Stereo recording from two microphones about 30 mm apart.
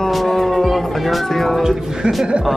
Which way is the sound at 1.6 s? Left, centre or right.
Centre.